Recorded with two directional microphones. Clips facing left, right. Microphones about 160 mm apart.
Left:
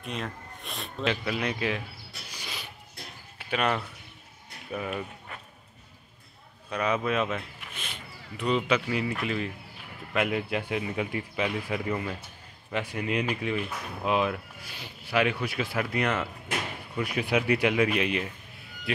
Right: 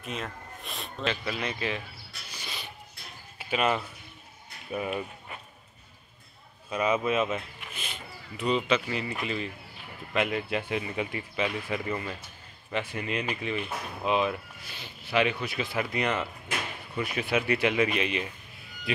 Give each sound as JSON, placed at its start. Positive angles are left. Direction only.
{"t": 0.0, "sound": "speech", "side_deg": 0}
{"t": 2.3, "sound": "a sound", "side_deg": 10}
{"t": 3.3, "sound": "speech", "side_deg": -5}
{"t": 6.7, "sound": "speech", "side_deg": -5}